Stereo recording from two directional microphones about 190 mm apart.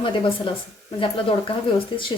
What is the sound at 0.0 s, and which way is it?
A woman's voice, 25° left (ahead or behind).